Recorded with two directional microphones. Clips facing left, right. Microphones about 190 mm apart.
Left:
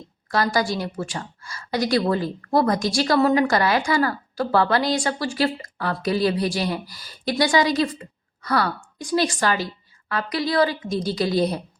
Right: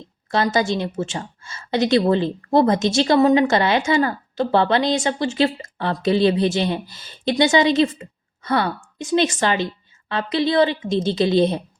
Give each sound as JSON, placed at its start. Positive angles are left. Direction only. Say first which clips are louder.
{"t": 0.3, "sound": "speech", "louder": "right 2 dB", "side_deg": -25}